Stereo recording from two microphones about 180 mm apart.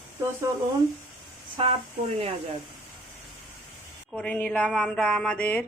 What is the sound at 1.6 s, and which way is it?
Speech, 30° right (ahead or behind).